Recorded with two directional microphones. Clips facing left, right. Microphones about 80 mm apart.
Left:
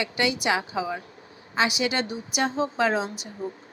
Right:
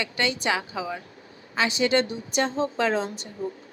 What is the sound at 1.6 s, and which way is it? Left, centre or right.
A woman's voice, centre.